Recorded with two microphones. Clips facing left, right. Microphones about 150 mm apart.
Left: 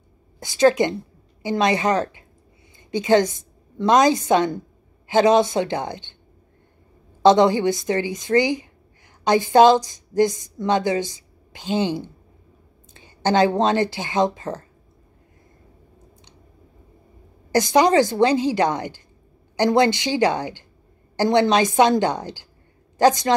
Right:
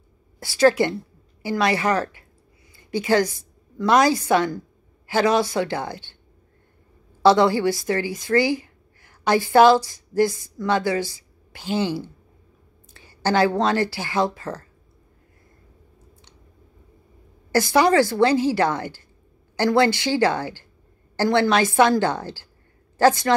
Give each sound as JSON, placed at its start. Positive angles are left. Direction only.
{"t": 0.4, "sound": "a woman's voice", "side_deg": 20}
{"t": 7.2, "sound": "a woman's voice", "side_deg": 20}
{"t": 17.5, "sound": "a woman's voice", "side_deg": 20}